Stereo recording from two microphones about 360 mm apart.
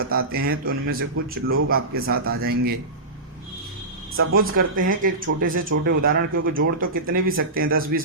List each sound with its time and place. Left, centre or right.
0.0 s speech: right
4.2 s speech: right
4.7 s speech: right